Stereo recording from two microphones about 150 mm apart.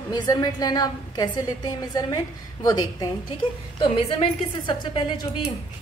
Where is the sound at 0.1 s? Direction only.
25° left (ahead or behind).